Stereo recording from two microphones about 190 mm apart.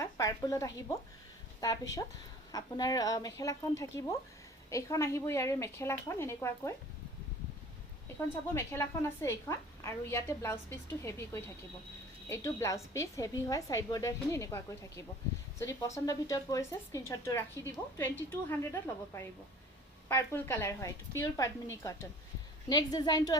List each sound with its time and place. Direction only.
0.0 s a woman's voice: 15° left (ahead or behind)
8.5 s a woman's voice: 15° left (ahead or behind)